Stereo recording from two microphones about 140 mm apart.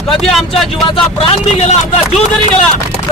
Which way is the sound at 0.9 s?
45° left (ahead or behind).